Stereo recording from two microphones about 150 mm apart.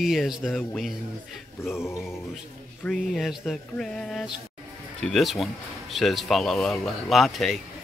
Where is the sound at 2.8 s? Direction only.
Centre (ahead or behind).